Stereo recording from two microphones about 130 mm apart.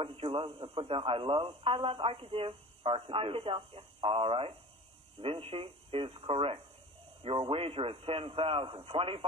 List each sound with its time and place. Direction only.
0.0 s speech: 45° right (ahead or behind)